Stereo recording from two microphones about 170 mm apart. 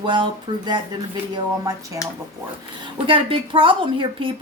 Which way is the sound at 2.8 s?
30° right (ahead or behind).